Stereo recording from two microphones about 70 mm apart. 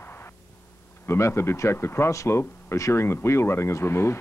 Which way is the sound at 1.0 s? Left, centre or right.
Left.